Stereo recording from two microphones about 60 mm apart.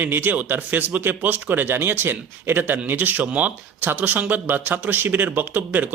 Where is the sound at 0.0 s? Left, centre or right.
Right.